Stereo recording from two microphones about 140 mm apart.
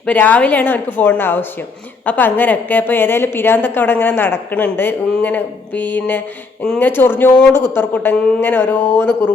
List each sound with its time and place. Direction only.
0.0 s a woman's voice: 10° left (ahead or behind)